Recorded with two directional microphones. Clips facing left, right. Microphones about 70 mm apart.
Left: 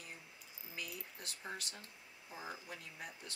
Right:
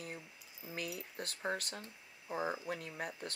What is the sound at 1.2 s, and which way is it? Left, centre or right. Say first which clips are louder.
Speech: right 9 dB; right.